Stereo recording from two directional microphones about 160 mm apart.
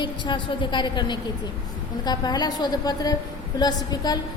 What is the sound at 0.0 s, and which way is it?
A woman's voice, 30° left (ahead or behind).